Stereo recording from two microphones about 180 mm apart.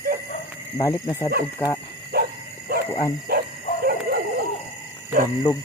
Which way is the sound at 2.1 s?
65° right (ahead or behind).